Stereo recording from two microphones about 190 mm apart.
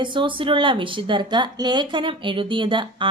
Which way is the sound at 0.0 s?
25° right (ahead or behind).